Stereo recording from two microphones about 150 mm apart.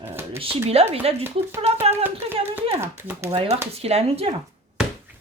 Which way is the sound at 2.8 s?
15° right (ahead or behind).